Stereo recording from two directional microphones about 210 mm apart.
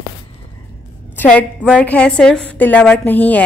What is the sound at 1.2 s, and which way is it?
A woman's voice, 5° left (ahead or behind).